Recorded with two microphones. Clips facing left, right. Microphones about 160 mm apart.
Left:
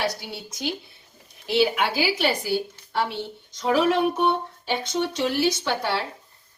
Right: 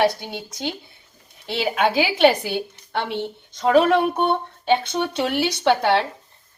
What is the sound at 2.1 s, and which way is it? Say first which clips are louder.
Speech: right 7 dB; 70° right (ahead or behind).